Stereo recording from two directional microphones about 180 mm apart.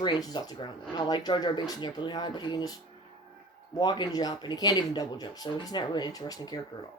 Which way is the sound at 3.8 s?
25° left (ahead or behind).